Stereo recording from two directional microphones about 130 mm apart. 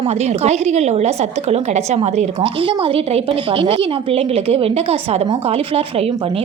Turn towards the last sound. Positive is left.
turn(degrees=-50)  # may be behind; listen again after turning